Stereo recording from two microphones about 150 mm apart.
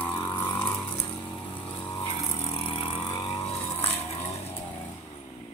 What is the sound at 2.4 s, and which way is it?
Vehicle, 40° left (ahead or behind).